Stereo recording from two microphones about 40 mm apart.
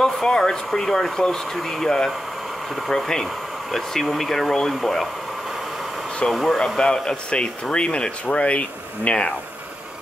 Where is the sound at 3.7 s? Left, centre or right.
Centre.